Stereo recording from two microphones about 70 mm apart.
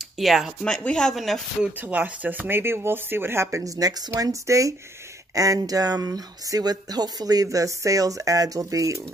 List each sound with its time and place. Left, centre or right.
0.2 s speech: centre
0.7 s speech: centre
1.1 s speech: centre
1.8 s speech: right
3.6 s speech: right